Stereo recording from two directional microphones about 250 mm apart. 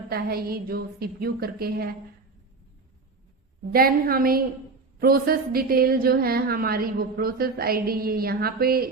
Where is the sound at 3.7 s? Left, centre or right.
Right.